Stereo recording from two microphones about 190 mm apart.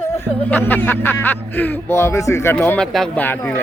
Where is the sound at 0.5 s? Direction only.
10° left (ahead or behind).